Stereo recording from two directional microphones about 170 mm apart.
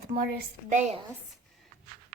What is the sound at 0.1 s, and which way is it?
Speech, 65° right (ahead or behind).